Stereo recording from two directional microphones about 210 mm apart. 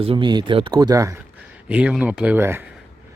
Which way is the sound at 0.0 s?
25° right (ahead or behind).